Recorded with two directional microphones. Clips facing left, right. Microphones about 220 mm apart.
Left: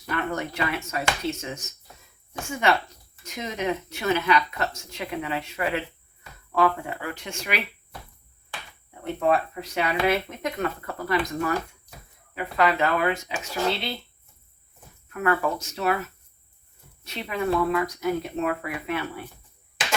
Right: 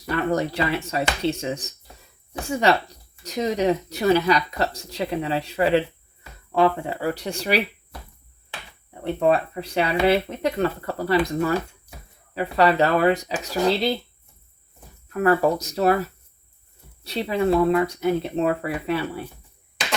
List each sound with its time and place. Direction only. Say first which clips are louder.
0.1 s speech: right 6 dB; 35° right (ahead or behind)
9.1 s speech: right 3 dB; 30° right (ahead or behind)
15.1 s speech: right 6 dB; 35° right (ahead or behind)